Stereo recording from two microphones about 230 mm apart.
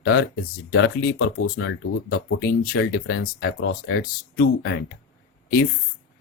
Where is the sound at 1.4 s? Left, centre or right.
Left.